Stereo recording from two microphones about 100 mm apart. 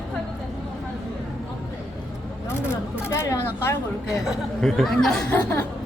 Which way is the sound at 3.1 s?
30° left (ahead or behind).